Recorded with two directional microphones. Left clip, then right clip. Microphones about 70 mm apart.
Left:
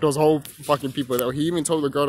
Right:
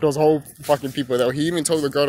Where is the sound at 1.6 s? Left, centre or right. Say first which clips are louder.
Right 1 dB; left.